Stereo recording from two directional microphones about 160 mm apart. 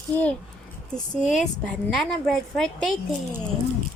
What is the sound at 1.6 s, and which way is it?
A woman's voice, 5° left (ahead or behind).